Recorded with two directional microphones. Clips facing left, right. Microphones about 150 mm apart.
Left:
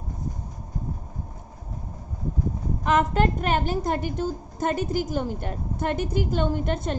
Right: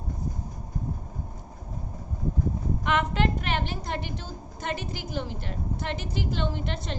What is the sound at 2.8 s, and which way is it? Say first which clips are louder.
A woman's voice: left 5 dB; 40° left (ahead or behind).